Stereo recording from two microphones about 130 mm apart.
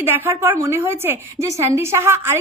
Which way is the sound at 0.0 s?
15° right (ahead or behind).